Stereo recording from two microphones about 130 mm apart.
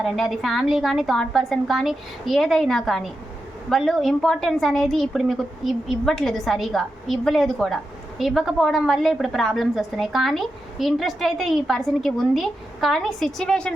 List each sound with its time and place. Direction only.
0.0 s a woman's voice: centre (ahead or behind)